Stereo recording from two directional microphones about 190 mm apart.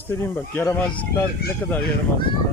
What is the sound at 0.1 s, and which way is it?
Speech, 10° left (ahead or behind).